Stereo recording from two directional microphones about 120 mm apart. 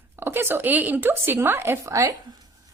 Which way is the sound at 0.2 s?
20° right (ahead or behind).